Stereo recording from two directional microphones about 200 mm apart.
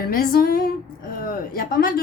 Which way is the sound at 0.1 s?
45° left (ahead or behind).